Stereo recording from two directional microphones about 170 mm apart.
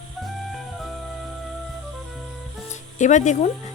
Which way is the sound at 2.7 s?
45° left (ahead or behind).